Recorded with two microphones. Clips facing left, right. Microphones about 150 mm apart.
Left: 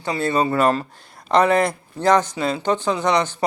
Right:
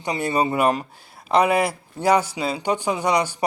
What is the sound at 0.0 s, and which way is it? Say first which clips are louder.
Speech: left 2 dB; 15° right (ahead or behind).